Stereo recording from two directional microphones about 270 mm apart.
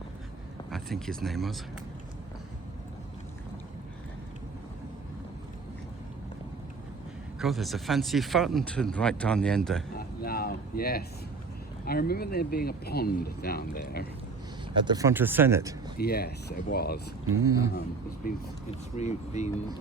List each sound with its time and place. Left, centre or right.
0.7 s speech: centre
7.3 s speech: centre
9.9 s a sound: left
11.9 s speech: left
14.8 s speech: centre
16.0 s speech: left
17.3 s speech: centre
18.2 s speech: left